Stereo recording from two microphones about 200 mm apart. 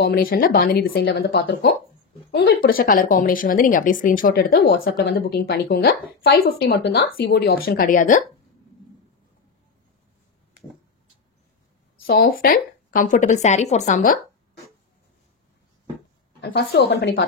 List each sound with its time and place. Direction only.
0.0 s speech: 50° left (ahead or behind)
4.8 s a woman's voice: 65° left (ahead or behind)
5.3 s speech: 50° left (ahead or behind)
12.1 s speech: 50° left (ahead or behind)
16.3 s a woman's voice: 55° left (ahead or behind)